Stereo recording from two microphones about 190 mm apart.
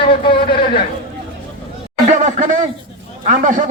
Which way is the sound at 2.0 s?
40° right (ahead or behind).